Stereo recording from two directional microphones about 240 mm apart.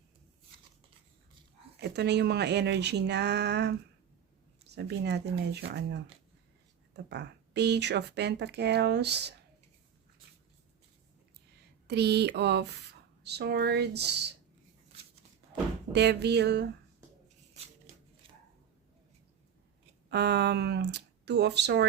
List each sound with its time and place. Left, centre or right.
1.8 s speech: right
11.9 s speech: right
15.9 s speech: right
20.1 s speech: right